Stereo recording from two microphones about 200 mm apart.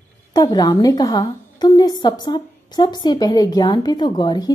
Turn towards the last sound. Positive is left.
turn(degrees=20)  # may be behind; listen again after turning